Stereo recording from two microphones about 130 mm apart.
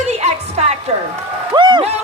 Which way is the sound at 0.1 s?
55° right (ahead or behind).